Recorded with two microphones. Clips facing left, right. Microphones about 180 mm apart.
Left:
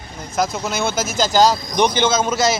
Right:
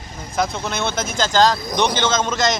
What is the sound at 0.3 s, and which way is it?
Speech, 5° left (ahead or behind).